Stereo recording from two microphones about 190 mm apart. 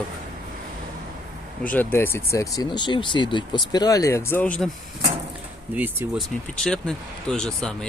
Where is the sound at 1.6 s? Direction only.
10° left (ahead or behind).